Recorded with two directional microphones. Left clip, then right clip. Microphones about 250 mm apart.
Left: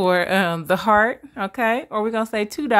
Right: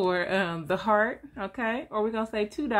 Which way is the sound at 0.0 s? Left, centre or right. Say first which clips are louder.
Left 8 dB; left.